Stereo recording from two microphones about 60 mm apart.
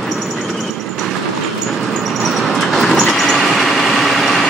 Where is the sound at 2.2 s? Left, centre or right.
Centre.